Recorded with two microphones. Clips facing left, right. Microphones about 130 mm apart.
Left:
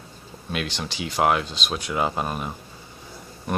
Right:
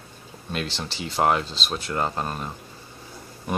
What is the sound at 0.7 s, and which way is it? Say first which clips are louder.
Speech: left 1 dB; centre (ahead or behind).